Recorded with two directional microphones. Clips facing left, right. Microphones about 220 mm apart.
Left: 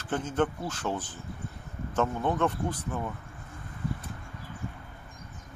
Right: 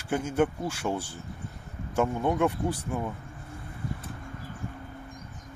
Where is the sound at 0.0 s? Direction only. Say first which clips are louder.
Right 2 dB; 10° right (ahead or behind).